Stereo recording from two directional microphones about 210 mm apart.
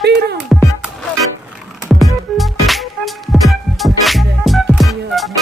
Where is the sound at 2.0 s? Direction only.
Centre (ahead or behind).